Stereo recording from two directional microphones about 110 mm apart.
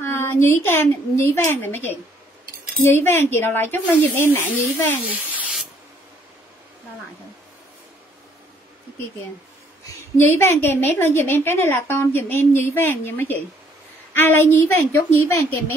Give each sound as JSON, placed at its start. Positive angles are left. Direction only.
{"t": 0.0, "sound": "a woman's voice", "side_deg": 20}
{"t": 10.1, "sound": "a woman's voice", "side_deg": 20}